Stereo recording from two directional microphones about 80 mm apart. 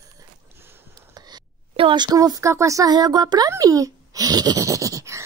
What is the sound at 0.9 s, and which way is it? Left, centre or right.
Whispering, right.